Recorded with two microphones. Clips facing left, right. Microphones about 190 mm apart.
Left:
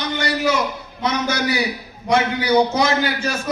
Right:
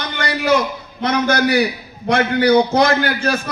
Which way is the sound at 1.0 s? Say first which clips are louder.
Right 4 dB; 55° right (ahead or behind).